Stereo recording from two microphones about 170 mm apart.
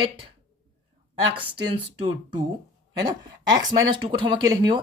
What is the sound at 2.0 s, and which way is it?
Speech, 30° right (ahead or behind).